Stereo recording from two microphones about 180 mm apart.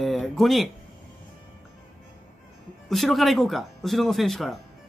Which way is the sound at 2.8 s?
Centre (ahead or behind).